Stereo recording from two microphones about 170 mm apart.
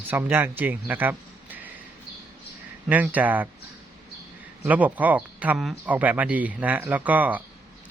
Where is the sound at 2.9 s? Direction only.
10° right (ahead or behind).